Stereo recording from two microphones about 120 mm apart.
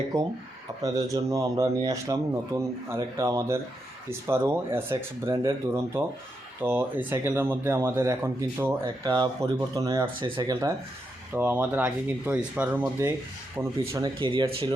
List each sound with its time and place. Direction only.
0.8 s speech: 30° right (ahead or behind)
9.0 s speech: 40° right (ahead or behind)
9.4 s speech: 25° right (ahead or behind); by 10.6 s 45° right (ahead or behind)
11.3 s speech: 15° right (ahead or behind)
14.0 s speech: 40° right (ahead or behind)